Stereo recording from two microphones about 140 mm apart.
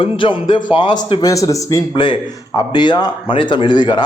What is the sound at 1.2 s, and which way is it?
Speech, 25° left (ahead or behind).